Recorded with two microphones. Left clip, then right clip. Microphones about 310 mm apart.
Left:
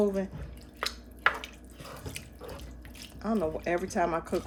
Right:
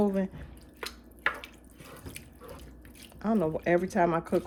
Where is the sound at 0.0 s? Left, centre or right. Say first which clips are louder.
Left 1 dB; right.